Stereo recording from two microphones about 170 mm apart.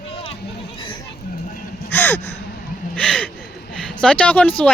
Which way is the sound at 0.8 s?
30° left (ahead or behind).